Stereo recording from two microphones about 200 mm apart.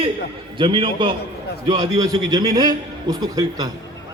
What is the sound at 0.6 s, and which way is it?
A man's voice, 25° right (ahead or behind).